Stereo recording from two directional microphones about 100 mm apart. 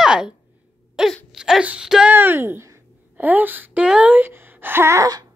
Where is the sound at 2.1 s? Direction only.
20° right (ahead or behind).